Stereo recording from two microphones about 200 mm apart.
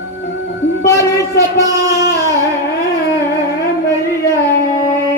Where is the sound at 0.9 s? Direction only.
15° left (ahead or behind).